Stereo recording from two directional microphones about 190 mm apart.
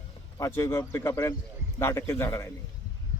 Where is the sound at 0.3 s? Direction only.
15° left (ahead or behind).